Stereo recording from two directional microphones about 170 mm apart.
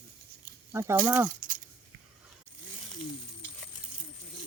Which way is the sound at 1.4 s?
55° right (ahead or behind).